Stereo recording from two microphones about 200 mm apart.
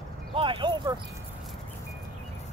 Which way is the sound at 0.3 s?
25° right (ahead or behind).